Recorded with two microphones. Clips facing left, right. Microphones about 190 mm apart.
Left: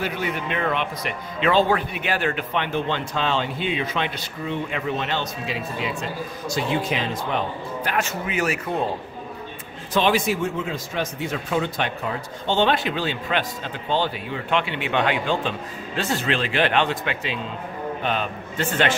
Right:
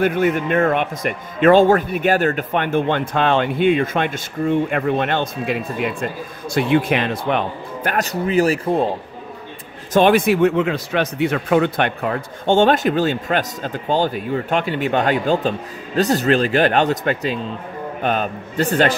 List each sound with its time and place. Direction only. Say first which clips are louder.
0.0 s a man's voice: right 9 dB; 50° right (ahead or behind)
7.9 s a man's voice: right 8 dB; 40° right (ahead or behind)
9.9 s a man's voice: right 7 dB; 55° right (ahead or behind); by 18.9 s 35° right (ahead or behind)